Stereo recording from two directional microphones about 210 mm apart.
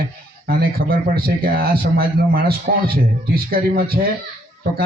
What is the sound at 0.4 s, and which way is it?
Speech, 45° right (ahead or behind).